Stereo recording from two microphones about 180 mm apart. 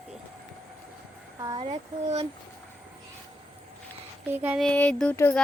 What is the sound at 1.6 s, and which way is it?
Speech, 35° right (ahead or behind).